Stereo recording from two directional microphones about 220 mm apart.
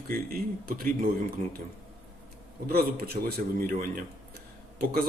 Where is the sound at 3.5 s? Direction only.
40° right (ahead or behind).